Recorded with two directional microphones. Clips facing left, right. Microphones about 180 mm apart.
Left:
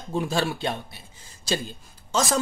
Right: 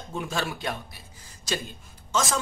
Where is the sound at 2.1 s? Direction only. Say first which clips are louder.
Left 3 dB; 35° left (ahead or behind).